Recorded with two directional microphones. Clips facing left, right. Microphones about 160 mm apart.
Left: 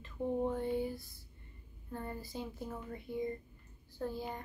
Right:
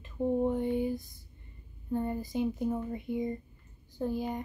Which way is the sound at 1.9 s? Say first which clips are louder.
Right 10 dB; 20° right (ahead or behind).